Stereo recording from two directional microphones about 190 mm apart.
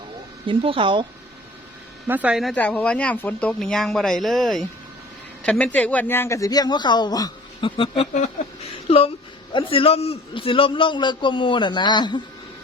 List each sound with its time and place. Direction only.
0.4 s speech: 25° right (ahead or behind)
2.0 s a man's voice: 10° right (ahead or behind); by 12.2 s 25° left (ahead or behind)